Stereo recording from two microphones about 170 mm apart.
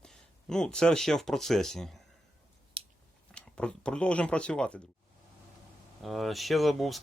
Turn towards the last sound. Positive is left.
turn(degrees=0)  # may be behind; listen again after turning